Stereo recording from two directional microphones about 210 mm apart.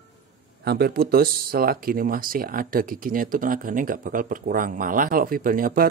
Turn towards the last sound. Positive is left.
turn(degrees=-40)  # may be behind; listen again after turning